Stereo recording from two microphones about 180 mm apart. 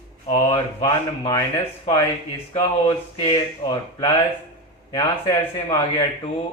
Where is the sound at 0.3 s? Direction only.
30° left (ahead or behind).